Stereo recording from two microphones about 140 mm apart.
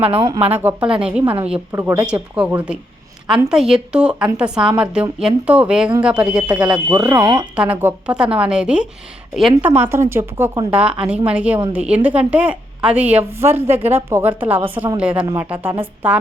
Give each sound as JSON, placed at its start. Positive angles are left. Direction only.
{"t": 0.5, "sound": "a woman's voice", "side_deg": -15}
{"t": 1.7, "sound": "speech", "side_deg": -20}
{"t": 2.0, "sound": "a woman's voice", "side_deg": -10}
{"t": 7.1, "sound": "speech", "side_deg": -30}
{"t": 7.5, "sound": "a woman's voice", "side_deg": -10}